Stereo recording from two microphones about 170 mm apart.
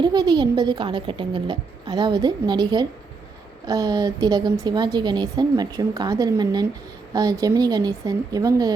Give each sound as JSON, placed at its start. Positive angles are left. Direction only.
{"t": 0.0, "sound": "a woman's voice", "side_deg": -25}